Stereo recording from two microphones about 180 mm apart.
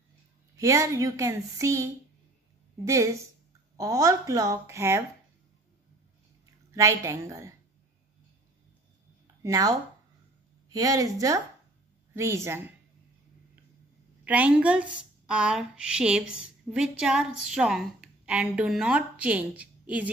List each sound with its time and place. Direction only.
0.6 s a woman's voice: 15° right (ahead or behind)
6.7 s a woman's voice: 15° right (ahead or behind)
9.4 s a woman's voice: 20° right (ahead or behind)
14.2 s a woman's voice: 10° right (ahead or behind)